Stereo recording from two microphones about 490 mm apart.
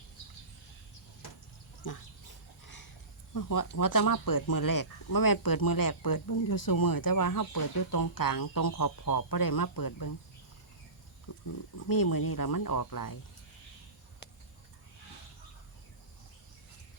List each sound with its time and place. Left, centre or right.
1.8 s speech: left
3.3 s speech: left
11.9 s speech: left